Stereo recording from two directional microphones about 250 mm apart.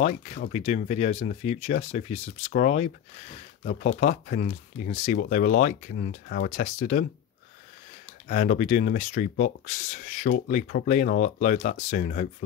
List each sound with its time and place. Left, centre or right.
0.0 s speech: left
8.3 s speech: left